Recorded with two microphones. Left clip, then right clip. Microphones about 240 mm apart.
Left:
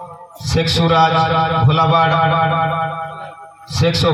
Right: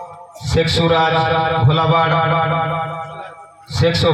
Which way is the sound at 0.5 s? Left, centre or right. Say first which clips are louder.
Even; left.